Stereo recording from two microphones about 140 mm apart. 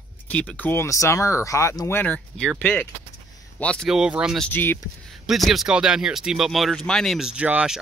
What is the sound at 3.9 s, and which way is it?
Speech, 5° right (ahead or behind).